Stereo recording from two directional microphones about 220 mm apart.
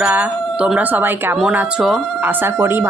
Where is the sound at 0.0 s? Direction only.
5° right (ahead or behind).